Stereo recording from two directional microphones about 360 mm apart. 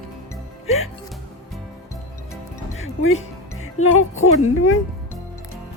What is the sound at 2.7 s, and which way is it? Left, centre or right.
Music, left.